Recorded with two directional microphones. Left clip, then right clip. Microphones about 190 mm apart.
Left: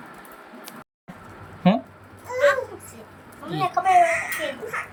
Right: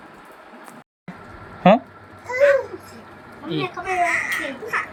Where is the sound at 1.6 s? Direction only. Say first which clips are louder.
Right 8 dB; 10° right (ahead or behind).